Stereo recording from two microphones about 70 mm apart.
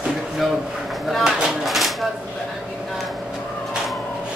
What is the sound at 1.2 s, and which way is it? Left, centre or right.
Dishes, centre.